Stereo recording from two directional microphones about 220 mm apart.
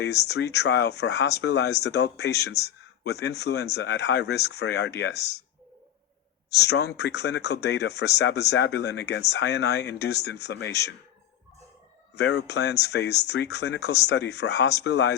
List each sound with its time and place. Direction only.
0.0 s speech: 50° left (ahead or behind)
6.6 s speech: 50° left (ahead or behind)
12.1 s speech: 50° left (ahead or behind)